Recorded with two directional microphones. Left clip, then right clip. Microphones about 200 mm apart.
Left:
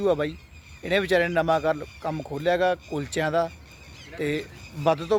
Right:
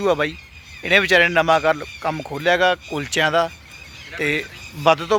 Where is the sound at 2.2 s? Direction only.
25° right (ahead or behind).